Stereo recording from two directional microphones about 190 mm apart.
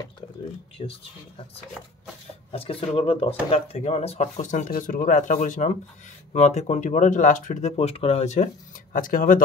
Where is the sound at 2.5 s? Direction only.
30° left (ahead or behind).